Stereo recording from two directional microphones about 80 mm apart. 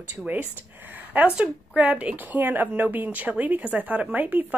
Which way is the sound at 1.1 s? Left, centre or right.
Centre.